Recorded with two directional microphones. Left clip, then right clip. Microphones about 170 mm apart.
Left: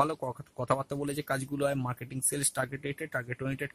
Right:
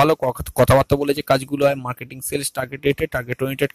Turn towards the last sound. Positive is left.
turn(degrees=-45)  # may be behind; listen again after turning